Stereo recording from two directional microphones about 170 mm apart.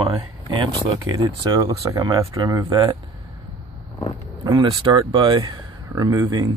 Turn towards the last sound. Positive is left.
turn(degrees=-20)  # may be behind; listen again after turning